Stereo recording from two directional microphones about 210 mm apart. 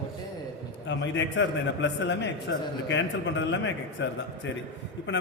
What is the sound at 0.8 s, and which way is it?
A man's voice, 60° left (ahead or behind).